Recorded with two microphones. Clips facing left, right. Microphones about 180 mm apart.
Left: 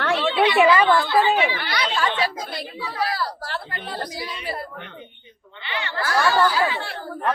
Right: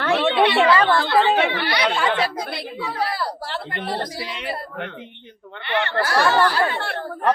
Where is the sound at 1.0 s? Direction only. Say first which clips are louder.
Right 1 dB; 65° right (ahead or behind); by 5.0 s 90° right.